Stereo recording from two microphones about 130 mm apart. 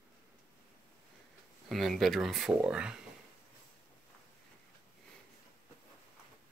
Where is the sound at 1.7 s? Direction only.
Centre (ahead or behind).